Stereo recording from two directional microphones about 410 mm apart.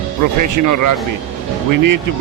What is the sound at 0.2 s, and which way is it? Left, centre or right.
Speech, right.